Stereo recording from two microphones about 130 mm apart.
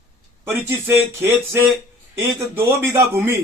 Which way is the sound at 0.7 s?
15° right (ahead or behind).